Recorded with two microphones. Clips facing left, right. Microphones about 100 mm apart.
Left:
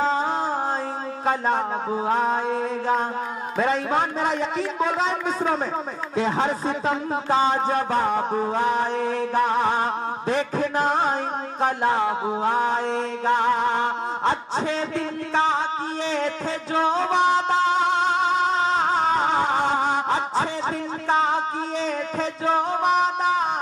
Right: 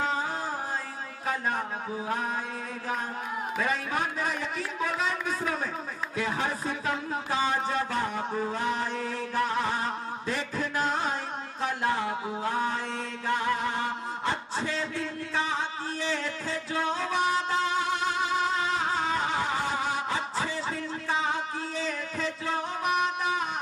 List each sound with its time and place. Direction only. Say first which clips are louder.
3.5 s a man's voice: left 9 dB; 25° left (ahead or behind)
8.0 s mantra: left 8 dB; 55° left (ahead or behind)
9.7 s mantra: left 7 dB; 50° left (ahead or behind)
10.9 s music: left 7 dB; 55° left (ahead or behind)
11.8 s a man's voice: left 5 dB; 30° left (ahead or behind)
12.7 s mantra: left 9 dB; 65° left (ahead or behind)
15.0 s music: left 8 dB; 70° left (ahead or behind)
17.1 s music: left 6 dB; 25° left (ahead or behind)
21.1 s music: left 8 dB; 65° left (ahead or behind)
21.8 s music: left 6 dB; 25° left (ahead or behind)